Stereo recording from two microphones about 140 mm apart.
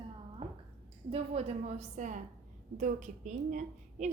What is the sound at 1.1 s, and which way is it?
A woman's voice, 45° right (ahead or behind).